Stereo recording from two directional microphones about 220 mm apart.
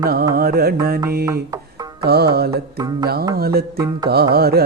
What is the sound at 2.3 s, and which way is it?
Mantra, 45° right (ahead or behind).